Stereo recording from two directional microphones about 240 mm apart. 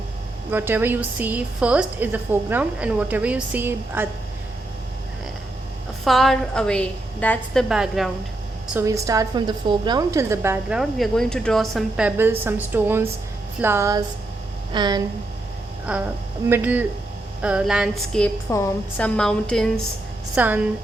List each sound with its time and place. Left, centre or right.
0.5 s a woman's voice: centre
6.1 s a woman's voice: centre
15.9 s a woman's voice: centre